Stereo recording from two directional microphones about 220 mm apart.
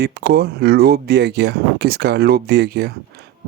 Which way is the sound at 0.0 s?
45° right (ahead or behind).